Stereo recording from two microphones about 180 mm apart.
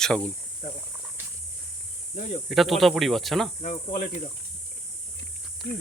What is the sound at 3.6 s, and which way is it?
Speech, 45° left (ahead or behind).